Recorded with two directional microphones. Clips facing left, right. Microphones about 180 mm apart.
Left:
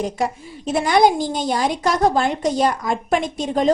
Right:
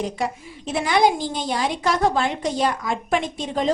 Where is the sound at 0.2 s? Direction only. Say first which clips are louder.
Left 3 dB; 45° left (ahead or behind).